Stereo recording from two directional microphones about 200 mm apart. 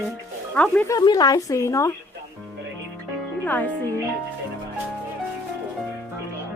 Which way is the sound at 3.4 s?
10° left (ahead or behind).